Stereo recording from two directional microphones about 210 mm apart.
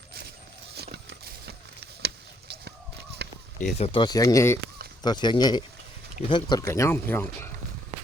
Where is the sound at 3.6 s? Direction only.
35° left (ahead or behind); by 7.5 s 10° left (ahead or behind).